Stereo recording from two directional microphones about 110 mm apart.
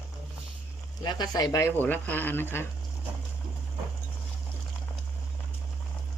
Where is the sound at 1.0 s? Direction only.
40° left (ahead or behind).